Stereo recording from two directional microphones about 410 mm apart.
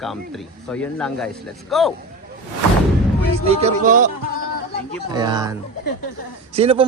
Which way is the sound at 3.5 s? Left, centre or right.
Centre.